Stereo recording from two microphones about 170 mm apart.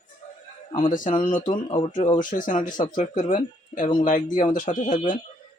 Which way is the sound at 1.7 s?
40° left (ahead or behind).